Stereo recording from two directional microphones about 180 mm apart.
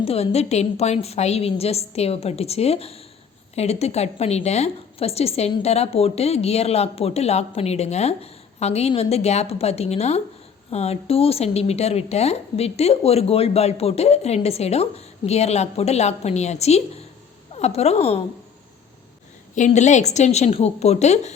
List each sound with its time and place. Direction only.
0.0 s a woman's voice: 35° left (ahead or behind)
19.5 s a woman's voice: 40° left (ahead or behind)